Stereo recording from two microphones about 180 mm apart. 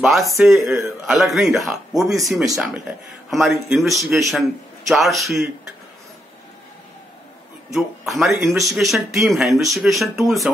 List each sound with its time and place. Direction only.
0.0 s speech: centre (ahead or behind)
7.7 s speech: centre (ahead or behind)